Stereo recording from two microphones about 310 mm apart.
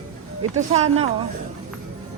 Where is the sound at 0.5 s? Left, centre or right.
Right.